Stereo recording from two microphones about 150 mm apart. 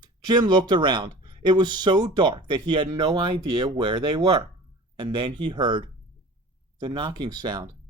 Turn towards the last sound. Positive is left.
turn(degrees=-30)  # may be behind; listen again after turning